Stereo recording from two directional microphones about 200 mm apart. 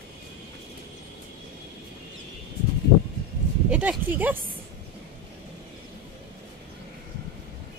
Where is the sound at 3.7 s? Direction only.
5° right (ahead or behind).